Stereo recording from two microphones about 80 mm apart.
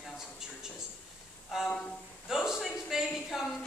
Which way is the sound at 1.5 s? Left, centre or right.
Centre.